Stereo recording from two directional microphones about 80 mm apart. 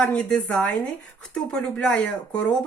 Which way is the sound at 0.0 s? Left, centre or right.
Centre.